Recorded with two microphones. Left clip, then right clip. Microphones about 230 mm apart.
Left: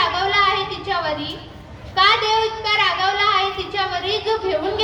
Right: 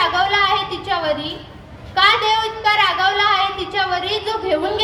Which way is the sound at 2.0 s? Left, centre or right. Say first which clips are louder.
Right 1 dB; right.